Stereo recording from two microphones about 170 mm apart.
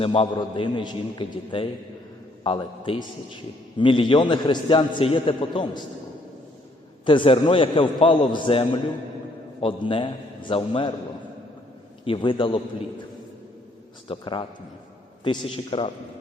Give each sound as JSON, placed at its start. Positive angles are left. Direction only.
{"t": 0.0, "sound": "a man's voice", "side_deg": 35}
{"t": 7.0, "sound": "a man's voice", "side_deg": 30}
{"t": 12.0, "sound": "a man's voice", "side_deg": 30}
{"t": 14.1, "sound": "a man's voice", "side_deg": 30}